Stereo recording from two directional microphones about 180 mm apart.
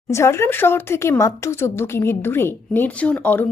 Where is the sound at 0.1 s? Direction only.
15° left (ahead or behind).